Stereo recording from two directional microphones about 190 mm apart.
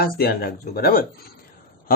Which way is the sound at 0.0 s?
55° left (ahead or behind).